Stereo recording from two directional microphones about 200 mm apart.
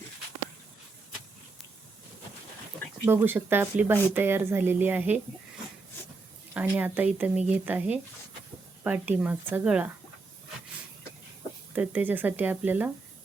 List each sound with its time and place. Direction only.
3.1 s speech: 10° right (ahead or behind)
6.5 s speech: 10° right (ahead or behind)
11.7 s speech: 10° right (ahead or behind)